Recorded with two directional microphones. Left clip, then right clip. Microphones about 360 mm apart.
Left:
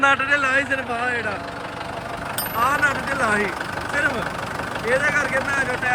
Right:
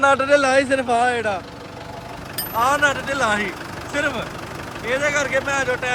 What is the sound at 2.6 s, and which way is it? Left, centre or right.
Speech, centre.